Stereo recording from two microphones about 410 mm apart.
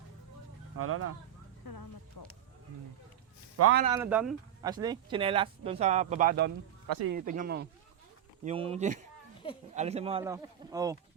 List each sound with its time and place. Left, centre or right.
0.8 s speech: right
1.6 s speech: left
3.6 s speech: right
3.8 s speech: centre